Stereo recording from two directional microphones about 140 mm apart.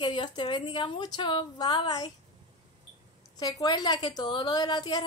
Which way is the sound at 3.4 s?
30° left (ahead or behind).